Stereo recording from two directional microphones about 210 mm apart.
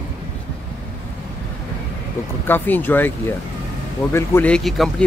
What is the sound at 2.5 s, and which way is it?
Speech, 10° left (ahead or behind).